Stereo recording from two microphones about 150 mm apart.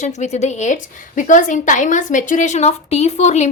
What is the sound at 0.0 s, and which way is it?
A woman's voice, 50° left (ahead or behind).